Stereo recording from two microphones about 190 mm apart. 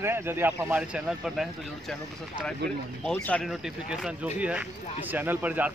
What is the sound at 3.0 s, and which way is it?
Speech, 5° left (ahead or behind).